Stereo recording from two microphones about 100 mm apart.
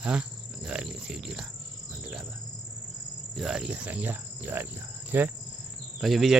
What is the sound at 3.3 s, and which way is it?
Speech, 5° right (ahead or behind).